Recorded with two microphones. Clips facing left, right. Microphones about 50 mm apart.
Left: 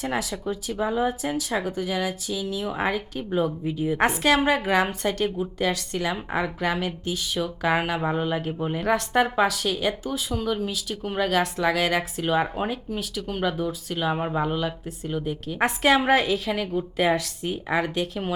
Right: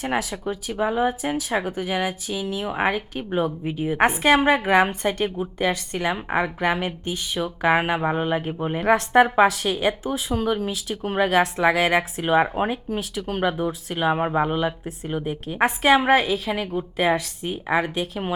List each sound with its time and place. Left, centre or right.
0.0 s speech: right
15.5 s a woman's voice: centre